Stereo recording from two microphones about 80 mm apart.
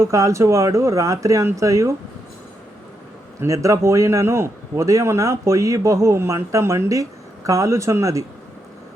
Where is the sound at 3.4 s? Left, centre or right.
Right.